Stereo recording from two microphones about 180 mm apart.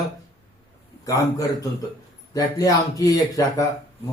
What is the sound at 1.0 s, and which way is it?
A man's voice, 20° left (ahead or behind).